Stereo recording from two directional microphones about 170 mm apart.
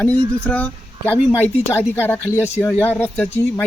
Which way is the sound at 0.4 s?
10° left (ahead or behind).